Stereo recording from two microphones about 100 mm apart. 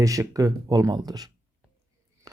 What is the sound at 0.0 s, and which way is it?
Speech, 35° right (ahead or behind).